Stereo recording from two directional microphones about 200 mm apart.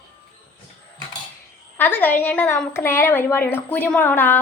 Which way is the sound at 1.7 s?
10° left (ahead or behind).